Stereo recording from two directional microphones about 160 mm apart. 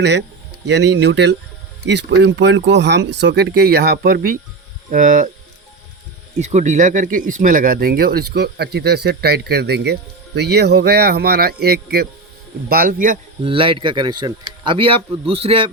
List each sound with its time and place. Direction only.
0.0 s speech: 90° right; by 4.4 s 70° right (ahead or behind)
4.9 s speech: 55° right (ahead or behind)
6.4 s speech: 45° right (ahead or behind); by 12.0 s 75° right (ahead or behind)
12.6 s a man's voice: 65° right (ahead or behind)
13.4 s speech: 35° right (ahead or behind)